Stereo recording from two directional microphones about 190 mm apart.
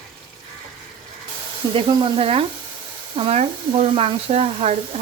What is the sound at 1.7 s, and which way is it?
Speech, 30° right (ahead or behind).